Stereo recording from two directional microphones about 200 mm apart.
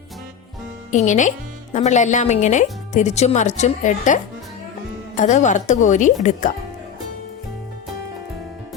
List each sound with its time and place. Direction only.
0.9 s speech: 35° left (ahead or behind)